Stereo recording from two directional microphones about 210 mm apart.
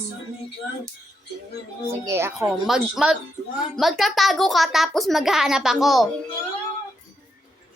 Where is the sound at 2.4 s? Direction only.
Centre (ahead or behind).